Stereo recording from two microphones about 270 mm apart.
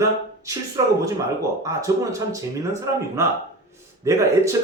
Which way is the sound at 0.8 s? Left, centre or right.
Centre.